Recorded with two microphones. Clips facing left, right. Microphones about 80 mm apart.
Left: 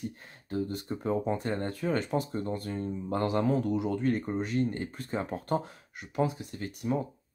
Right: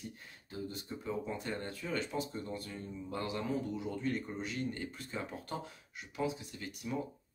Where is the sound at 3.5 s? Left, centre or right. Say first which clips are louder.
Left 8 dB; left.